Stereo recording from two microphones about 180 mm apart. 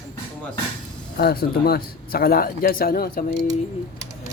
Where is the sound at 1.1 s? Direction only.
60° left (ahead or behind).